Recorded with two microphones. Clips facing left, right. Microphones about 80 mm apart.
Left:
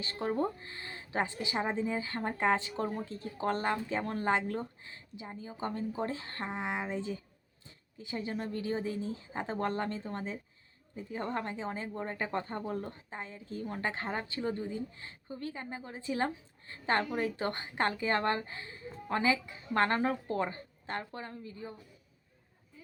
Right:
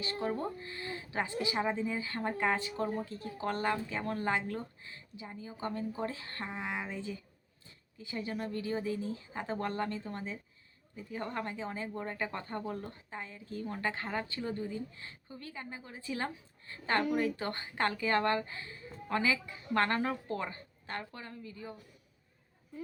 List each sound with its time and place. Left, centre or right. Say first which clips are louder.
0.0 s a woman's voice: left 2 dB; left